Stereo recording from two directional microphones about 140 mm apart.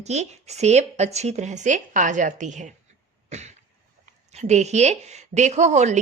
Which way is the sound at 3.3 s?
55° right (ahead or behind).